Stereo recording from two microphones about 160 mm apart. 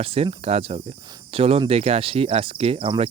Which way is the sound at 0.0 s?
40° right (ahead or behind).